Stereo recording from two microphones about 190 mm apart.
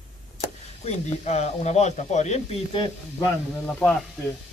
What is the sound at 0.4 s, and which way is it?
Speech, 35° left (ahead or behind).